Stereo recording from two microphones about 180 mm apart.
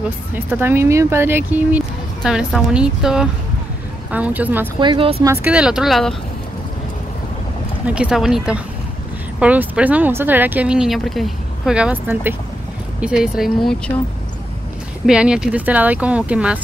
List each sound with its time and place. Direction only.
0.5 s a woman's voice: 10° right (ahead or behind)
4.7 s speech: 30° right (ahead or behind)
5.2 s a woman's voice: 10° right (ahead or behind)
7.8 s a woman's voice: 5° right (ahead or behind)
15.0 s speech: 5° right (ahead or behind)